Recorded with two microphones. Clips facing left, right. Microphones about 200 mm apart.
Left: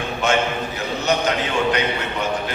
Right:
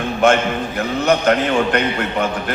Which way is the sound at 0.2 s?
55° right (ahead or behind).